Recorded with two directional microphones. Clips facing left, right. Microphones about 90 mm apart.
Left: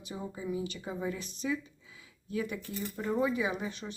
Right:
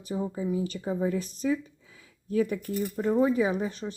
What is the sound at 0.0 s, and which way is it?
Speech, 40° right (ahead or behind).